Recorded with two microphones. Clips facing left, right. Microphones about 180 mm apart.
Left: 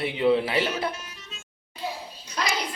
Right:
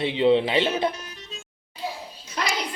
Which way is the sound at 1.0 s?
35° right (ahead or behind).